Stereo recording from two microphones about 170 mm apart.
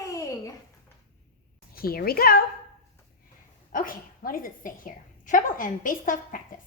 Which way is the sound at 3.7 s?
55° left (ahead or behind).